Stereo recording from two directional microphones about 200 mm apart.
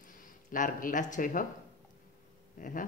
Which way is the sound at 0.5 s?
40° left (ahead or behind).